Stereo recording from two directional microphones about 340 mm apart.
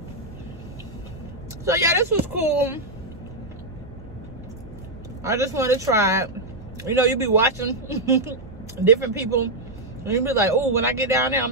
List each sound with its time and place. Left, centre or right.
1.6 s speech: centre
5.2 s speech: centre